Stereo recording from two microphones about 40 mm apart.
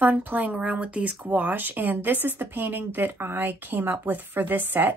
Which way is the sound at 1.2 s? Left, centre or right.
Right.